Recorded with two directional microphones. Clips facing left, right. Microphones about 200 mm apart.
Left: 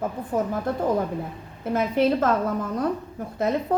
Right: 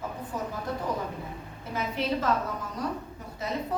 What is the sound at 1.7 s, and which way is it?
Speech, 50° left (ahead or behind).